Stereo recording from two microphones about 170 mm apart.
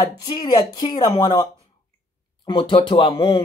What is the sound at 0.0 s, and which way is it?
Speech, 25° left (ahead or behind).